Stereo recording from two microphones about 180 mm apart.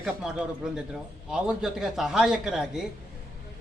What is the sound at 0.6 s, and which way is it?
Speech, 5° right (ahead or behind).